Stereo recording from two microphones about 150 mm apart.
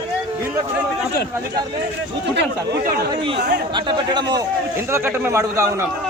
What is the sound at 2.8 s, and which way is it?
Speech, 90° right.